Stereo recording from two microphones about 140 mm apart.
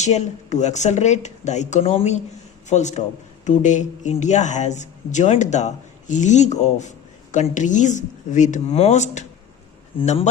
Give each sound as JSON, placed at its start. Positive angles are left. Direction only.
{"t": 0.0, "sound": "speech", "side_deg": 55}
{"t": 10.0, "sound": "speech", "side_deg": 45}